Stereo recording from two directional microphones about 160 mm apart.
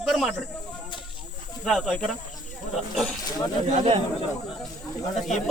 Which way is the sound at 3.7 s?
40° right (ahead or behind).